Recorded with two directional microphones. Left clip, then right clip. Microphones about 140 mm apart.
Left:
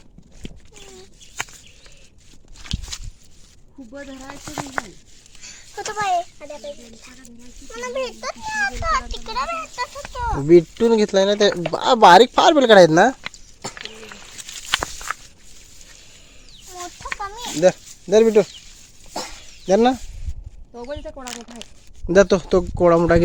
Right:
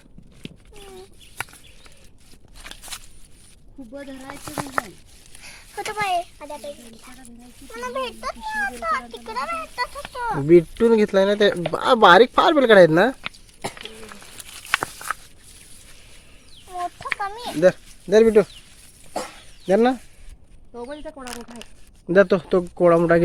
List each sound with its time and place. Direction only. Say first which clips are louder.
4.4 s speech: even; centre (ahead or behind)
5.5 s a child's voice: left 1 dB; 40° right (ahead or behind); by 6.7 s 25° right (ahead or behind)
7.8 s speech: left 2 dB; 25° right (ahead or behind)
8.6 s a child's voice: left 4 dB; 10° right (ahead or behind)
9.1 s speech: left 2 dB; 25° right (ahead or behind)
10.2 s speech: left 1 dB; 30° right (ahead or behind)
10.4 s speech: left 1 dB; centre (ahead or behind)
14.5 s walk: left 1 dB; 20° left (ahead or behind)
14.9 s walk: even; 5° left (ahead or behind)
17.0 s a sound: right 2 dB; 70° right (ahead or behind)
17.6 s speech: left 1 dB; centre (ahead or behind)
19.6 s speech: left 2 dB; 20° left (ahead or behind)
20.7 s speech: left 2 dB; 90° left
21.2 s speech: left 2 dB; 20° left (ahead or behind)